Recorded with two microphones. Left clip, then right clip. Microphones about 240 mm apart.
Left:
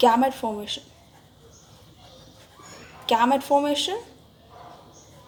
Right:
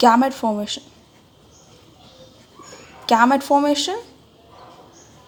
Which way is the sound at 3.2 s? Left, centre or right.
Right.